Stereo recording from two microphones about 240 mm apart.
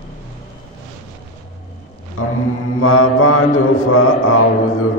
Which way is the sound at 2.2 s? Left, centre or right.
Left.